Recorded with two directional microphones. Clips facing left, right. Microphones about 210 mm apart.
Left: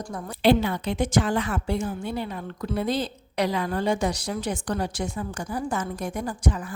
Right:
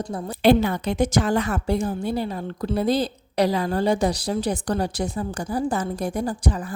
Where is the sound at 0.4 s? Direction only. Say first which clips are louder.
Right 3 dB; 45° right (ahead or behind).